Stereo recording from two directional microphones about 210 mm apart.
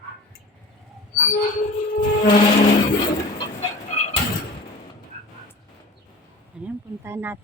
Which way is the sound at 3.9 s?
35° left (ahead or behind).